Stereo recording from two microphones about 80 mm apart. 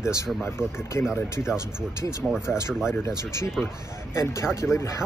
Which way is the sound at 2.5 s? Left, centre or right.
Centre.